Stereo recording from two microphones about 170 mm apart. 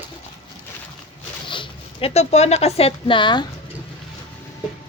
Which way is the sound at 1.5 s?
30° left (ahead or behind).